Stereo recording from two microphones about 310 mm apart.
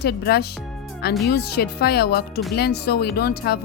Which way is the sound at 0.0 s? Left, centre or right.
Left.